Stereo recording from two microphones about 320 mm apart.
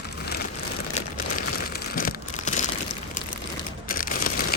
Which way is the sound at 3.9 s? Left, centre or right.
Left.